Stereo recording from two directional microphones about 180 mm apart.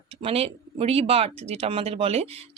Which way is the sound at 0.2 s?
35° right (ahead or behind).